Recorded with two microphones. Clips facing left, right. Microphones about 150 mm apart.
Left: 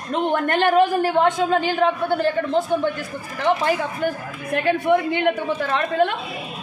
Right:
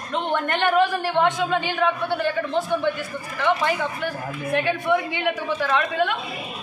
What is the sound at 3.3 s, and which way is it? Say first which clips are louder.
A man's voice: left 2 dB; 40° left (ahead or behind).